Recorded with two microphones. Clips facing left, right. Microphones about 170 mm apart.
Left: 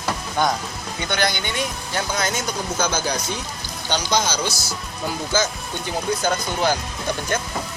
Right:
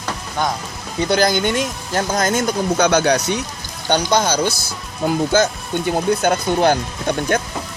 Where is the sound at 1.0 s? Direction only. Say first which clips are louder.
Right 8 dB; 40° right (ahead or behind); by 3.4 s 75° right (ahead or behind).